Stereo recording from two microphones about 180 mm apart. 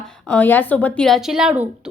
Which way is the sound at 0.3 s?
10° left (ahead or behind).